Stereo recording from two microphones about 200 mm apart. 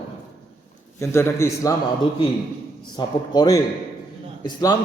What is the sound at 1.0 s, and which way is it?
Speech, 15° left (ahead or behind).